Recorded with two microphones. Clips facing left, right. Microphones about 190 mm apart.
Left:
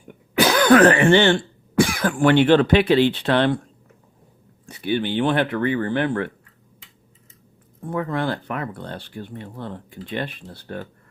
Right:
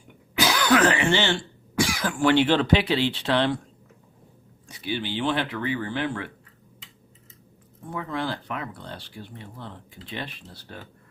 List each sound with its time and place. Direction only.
0.3 s speech: 55° left (ahead or behind)
4.6 s speech: 55° left (ahead or behind)
7.9 s speech: 55° left (ahead or behind)